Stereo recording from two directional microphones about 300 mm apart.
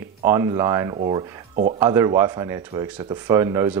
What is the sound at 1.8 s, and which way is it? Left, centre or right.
Speech, centre.